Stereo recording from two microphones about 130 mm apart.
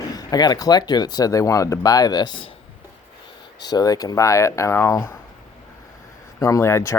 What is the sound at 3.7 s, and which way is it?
Speech, 30° left (ahead or behind).